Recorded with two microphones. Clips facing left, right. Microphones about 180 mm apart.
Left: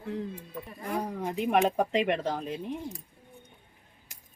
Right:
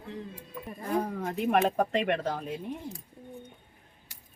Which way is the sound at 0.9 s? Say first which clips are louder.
Right 2 dB; 10° left (ahead or behind).